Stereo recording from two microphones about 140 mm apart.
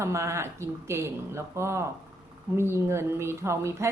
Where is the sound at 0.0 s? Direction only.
20° right (ahead or behind).